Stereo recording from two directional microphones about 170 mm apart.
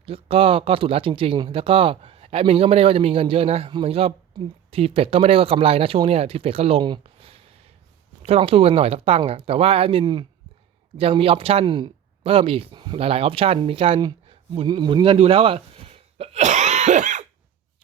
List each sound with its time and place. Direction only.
0.0 s speech: 35° right (ahead or behind)